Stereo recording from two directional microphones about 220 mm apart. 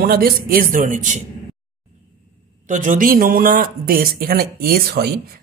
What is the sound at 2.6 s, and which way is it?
Speech, 35° right (ahead or behind).